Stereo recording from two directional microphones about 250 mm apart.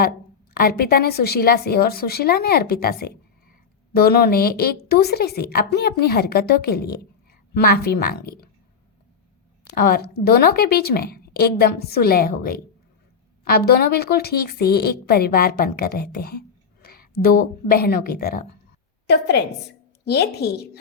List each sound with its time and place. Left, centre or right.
0.5 s a woman's voice: left
9.7 s a woman's voice: left